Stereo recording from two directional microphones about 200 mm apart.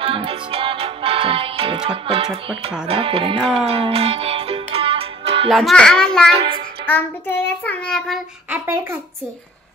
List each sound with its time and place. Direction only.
0.0 s music: 25° right (ahead or behind)
2.8 s speech: 25° right (ahead or behind)
3.4 s music: 30° right (ahead or behind)
5.5 s a child's voice: centre (ahead or behind)
6.9 s child singing: 10° left (ahead or behind)
7.6 s a child's voice: 5° left (ahead or behind)
8.5 s speech: 10° right (ahead or behind)